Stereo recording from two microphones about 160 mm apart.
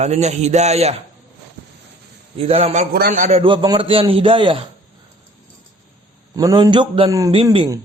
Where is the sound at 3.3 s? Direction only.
30° right (ahead or behind).